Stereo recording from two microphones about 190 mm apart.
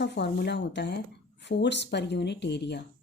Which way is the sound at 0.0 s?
65° left (ahead or behind).